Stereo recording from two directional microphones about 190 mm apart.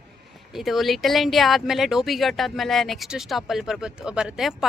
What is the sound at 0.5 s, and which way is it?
Speech, centre (ahead or behind).